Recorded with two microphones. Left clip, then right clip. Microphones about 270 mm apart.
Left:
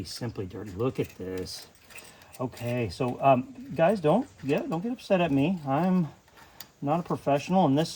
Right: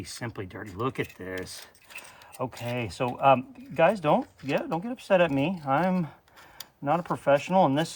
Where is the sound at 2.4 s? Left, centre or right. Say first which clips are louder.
Even; right.